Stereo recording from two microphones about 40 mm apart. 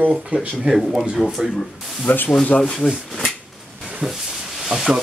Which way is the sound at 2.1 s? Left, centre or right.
Left.